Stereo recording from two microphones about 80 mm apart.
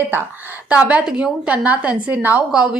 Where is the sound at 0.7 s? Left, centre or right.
Centre.